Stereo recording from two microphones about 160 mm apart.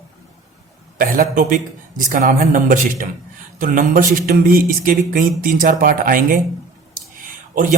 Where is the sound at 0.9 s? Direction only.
60° right (ahead or behind).